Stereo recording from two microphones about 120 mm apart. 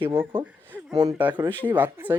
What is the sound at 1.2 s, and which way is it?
Speech, 15° right (ahead or behind).